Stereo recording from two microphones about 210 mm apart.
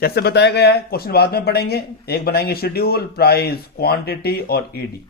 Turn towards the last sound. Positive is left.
turn(degrees=45)  # may be behind; listen again after turning